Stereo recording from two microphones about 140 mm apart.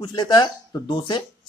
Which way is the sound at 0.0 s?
30° left (ahead or behind).